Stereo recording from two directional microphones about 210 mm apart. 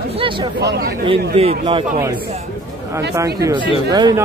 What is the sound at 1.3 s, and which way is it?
Speech, 25° right (ahead or behind).